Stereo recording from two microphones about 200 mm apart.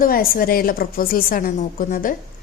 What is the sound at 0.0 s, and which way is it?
A woman's voice, 45° left (ahead or behind).